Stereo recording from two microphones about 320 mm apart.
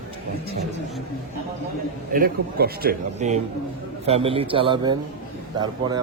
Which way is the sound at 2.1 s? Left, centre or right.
Right.